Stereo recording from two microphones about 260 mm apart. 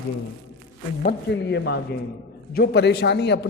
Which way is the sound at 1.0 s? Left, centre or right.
Left.